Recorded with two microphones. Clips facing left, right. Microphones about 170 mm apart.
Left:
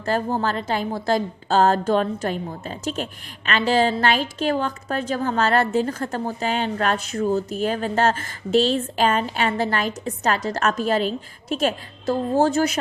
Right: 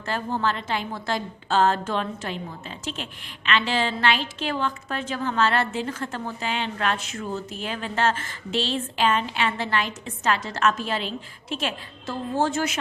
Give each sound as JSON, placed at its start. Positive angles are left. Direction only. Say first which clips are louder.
{"t": 0.0, "sound": "a woman's voice", "louder": "left 4 dB", "side_deg": 40}